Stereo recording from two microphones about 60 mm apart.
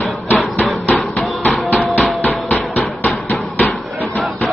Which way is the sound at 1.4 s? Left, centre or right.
Left.